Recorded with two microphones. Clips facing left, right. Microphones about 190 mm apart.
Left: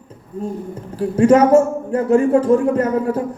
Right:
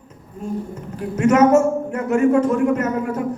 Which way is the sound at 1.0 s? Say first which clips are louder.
Left 3 dB; 30° left (ahead or behind).